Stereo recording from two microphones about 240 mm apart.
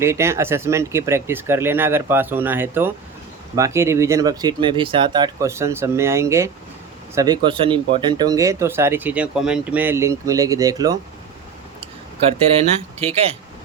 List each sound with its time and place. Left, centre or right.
0.0 s speech: centre
13.0 s speech: right